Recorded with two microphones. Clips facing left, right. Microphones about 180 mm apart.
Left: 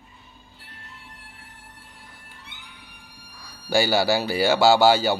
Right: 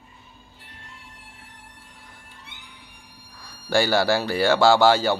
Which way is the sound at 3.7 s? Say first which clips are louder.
Even; 5° left (ahead or behind).